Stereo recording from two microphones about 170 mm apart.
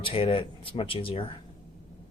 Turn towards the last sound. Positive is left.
turn(degrees=30)  # may be behind; listen again after turning